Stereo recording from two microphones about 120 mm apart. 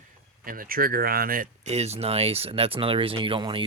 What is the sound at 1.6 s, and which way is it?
Speech, 65° right (ahead or behind).